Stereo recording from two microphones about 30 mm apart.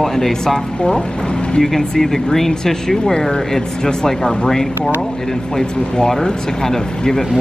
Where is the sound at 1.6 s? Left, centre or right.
Centre.